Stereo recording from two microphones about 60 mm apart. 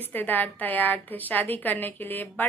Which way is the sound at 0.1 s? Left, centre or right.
Left.